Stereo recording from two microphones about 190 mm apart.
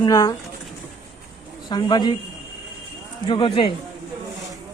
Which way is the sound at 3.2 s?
25° left (ahead or behind).